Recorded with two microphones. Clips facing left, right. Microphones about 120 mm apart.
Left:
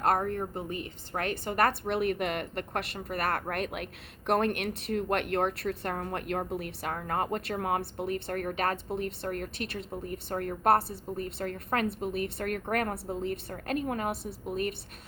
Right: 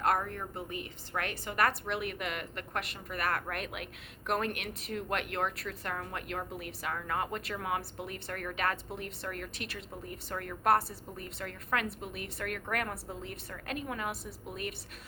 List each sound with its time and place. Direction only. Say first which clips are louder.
0.0 s a woman's voice: left 4 dB; 40° left (ahead or behind); by 5.0 s 60° left (ahead or behind)
5.0 s a woman's voice: left 5 dB; 45° left (ahead or behind)